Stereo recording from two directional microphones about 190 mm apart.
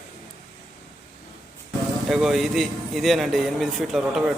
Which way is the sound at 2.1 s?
Centre (ahead or behind).